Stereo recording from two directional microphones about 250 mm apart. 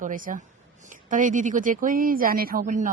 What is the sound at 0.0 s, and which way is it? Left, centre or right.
Speech, right.